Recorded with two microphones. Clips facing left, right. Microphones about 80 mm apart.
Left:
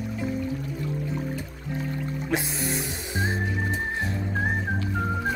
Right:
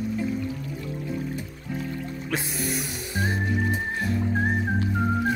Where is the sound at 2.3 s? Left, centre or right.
Left.